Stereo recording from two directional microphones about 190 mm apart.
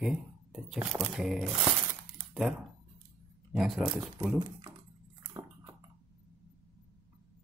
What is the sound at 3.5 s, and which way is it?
Speech, centre (ahead or behind).